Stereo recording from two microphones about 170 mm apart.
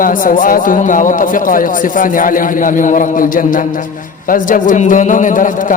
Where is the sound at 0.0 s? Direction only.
55° left (ahead or behind).